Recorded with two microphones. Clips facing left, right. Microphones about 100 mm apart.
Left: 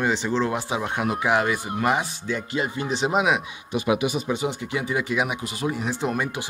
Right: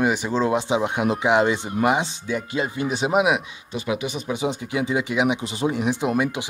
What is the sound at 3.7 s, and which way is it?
Speech, 15° left (ahead or behind).